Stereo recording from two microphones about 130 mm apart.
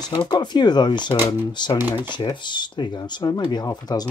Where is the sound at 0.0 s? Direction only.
35° left (ahead or behind).